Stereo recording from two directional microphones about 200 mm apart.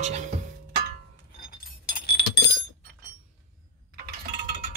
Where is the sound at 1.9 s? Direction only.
50° left (ahead or behind).